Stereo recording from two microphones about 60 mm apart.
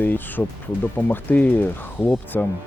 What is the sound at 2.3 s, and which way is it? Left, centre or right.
Speech, left.